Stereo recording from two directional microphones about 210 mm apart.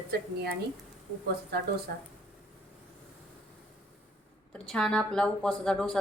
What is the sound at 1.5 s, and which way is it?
Speech, 50° right (ahead or behind).